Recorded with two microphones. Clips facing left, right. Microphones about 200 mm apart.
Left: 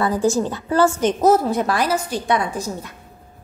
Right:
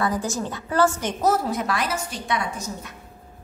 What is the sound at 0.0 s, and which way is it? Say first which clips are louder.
A woman's voice: left 7 dB; 30° left (ahead or behind).